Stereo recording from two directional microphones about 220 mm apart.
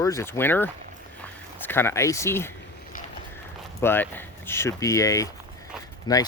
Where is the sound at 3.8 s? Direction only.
10° left (ahead or behind).